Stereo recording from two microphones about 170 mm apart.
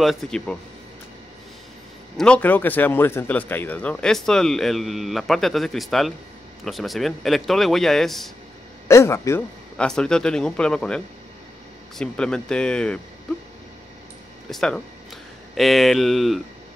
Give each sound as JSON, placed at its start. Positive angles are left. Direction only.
{"t": 0.0, "sound": "speech", "side_deg": 0}
{"t": 2.1, "sound": "speech", "side_deg": 5}
{"t": 8.8, "sound": "speech", "side_deg": 15}
{"t": 9.8, "sound": "speech", "side_deg": 5}
{"t": 12.0, "sound": "speech", "side_deg": 5}
{"t": 14.5, "sound": "speech", "side_deg": 5}